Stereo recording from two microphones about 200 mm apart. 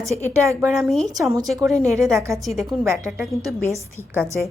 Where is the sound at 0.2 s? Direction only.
15° right (ahead or behind).